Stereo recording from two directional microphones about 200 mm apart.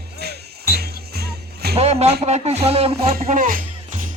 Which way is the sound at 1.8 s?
30° right (ahead or behind).